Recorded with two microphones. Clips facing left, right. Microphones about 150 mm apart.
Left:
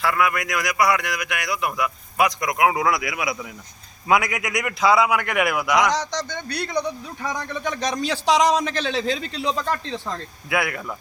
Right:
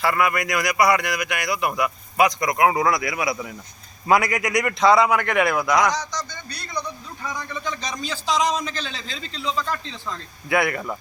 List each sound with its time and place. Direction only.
0.0 s a man's voice: centre (ahead or behind)
5.9 s a man's voice: 75° left (ahead or behind); by 10.2 s 60° left (ahead or behind)
10.5 s a man's voice: centre (ahead or behind)